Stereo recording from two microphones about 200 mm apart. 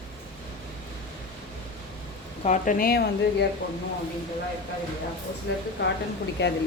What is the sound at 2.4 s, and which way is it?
A woman's voice, 40° left (ahead or behind).